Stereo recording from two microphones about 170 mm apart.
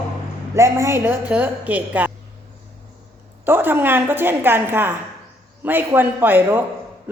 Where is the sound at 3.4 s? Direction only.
10° right (ahead or behind).